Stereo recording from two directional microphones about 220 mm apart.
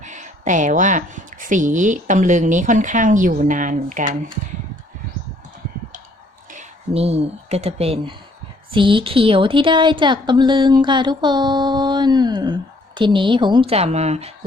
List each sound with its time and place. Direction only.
0.0 s speech: 35° right (ahead or behind)
6.5 s speech: 30° right (ahead or behind)
8.7 s a sound: 20° right (ahead or behind)